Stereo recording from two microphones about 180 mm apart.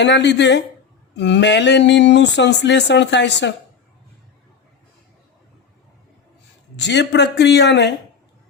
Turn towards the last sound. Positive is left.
turn(degrees=75)  # may be behind; listen again after turning